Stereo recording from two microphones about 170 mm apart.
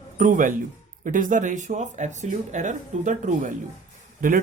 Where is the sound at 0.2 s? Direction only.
50° right (ahead or behind).